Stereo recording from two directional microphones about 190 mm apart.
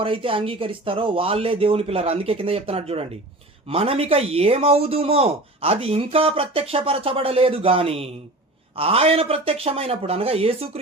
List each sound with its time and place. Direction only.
0.0 s speech: 30° right (ahead or behind)